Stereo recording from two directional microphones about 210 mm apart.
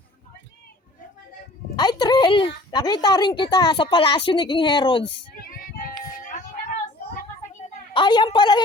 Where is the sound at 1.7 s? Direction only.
20° left (ahead or behind).